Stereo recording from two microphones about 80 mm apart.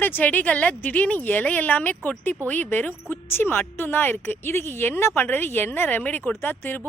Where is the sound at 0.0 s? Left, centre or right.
Left.